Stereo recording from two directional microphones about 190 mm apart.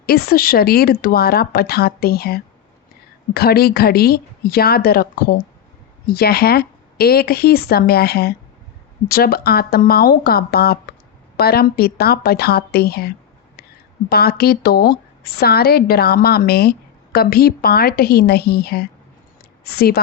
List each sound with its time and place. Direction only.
0.0 s a woman's voice: 55° left (ahead or behind)